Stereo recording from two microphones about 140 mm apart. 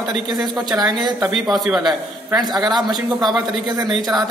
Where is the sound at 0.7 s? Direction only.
30° right (ahead or behind).